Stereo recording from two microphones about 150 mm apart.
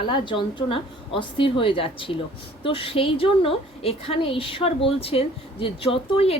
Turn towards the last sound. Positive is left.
turn(degrees=40)  # may be behind; listen again after turning